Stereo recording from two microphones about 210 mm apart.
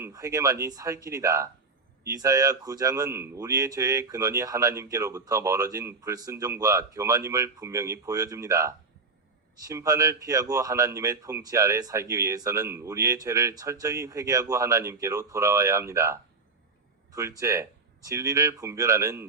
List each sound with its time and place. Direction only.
0.0 s speech: 15° right (ahead or behind)